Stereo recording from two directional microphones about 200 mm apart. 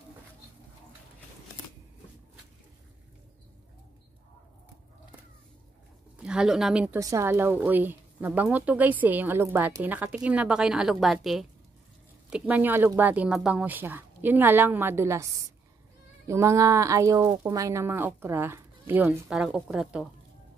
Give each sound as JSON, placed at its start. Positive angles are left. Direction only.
{"t": 6.1, "sound": "speech", "side_deg": -5}
{"t": 7.0, "sound": "a woman's voice", "side_deg": -15}